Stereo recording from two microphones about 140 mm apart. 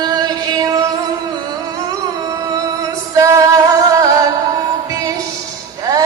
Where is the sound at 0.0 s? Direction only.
30° right (ahead or behind).